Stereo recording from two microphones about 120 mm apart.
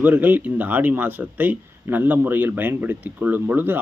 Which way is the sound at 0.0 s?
15° right (ahead or behind).